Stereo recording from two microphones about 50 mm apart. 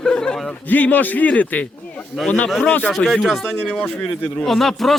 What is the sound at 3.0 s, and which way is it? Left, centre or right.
Speech, left.